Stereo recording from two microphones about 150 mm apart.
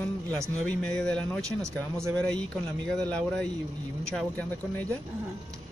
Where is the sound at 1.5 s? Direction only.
20° right (ahead or behind).